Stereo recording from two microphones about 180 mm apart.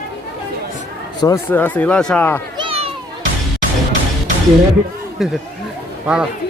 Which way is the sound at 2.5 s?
30° right (ahead or behind).